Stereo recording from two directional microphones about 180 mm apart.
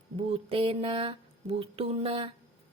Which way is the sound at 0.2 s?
30° right (ahead or behind).